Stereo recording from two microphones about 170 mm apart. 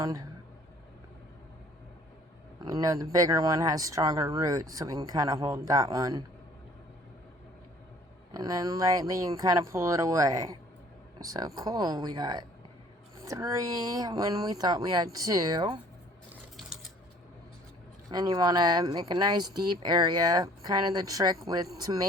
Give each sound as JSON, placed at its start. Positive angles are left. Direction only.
{"t": 0.0, "sound": "speech", "side_deg": -20}
{"t": 2.6, "sound": "speech", "side_deg": -20}
{"t": 8.3, "sound": "speech", "side_deg": -25}
{"t": 16.6, "sound": "typewriter", "side_deg": 0}
{"t": 18.1, "sound": "speech", "side_deg": -25}